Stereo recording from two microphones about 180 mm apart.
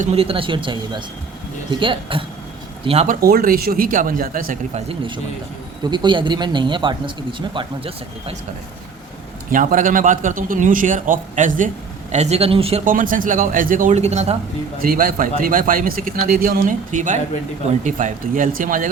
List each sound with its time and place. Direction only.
0.0 s a man's voice: 35° right (ahead or behind)
3.1 s a man's voice: 55° right (ahead or behind)
4.7 s speech: 30° right (ahead or behind)
9.5 s a man's voice: 45° right (ahead or behind)
12.8 s a man's voice: 50° right (ahead or behind)
14.8 s a man's voice: 55° right (ahead or behind)